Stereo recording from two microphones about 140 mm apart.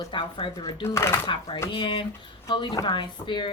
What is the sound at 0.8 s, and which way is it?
Speech, 20° left (ahead or behind).